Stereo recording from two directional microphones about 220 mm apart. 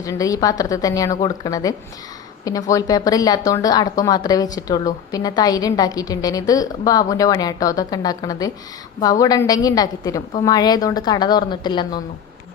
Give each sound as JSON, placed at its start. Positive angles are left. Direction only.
{"t": 0.0, "sound": "a woman's voice", "side_deg": 15}